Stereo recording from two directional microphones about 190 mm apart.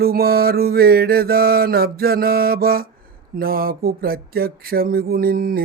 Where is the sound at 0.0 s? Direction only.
55° right (ahead or behind).